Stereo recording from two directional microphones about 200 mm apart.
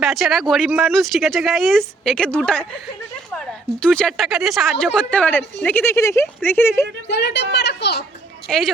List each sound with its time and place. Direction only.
0.0 s speech: centre (ahead or behind)
7.1 s speech: 60° left (ahead or behind)
7.5 s a sound: 60° left (ahead or behind)
8.4 s speech: centre (ahead or behind)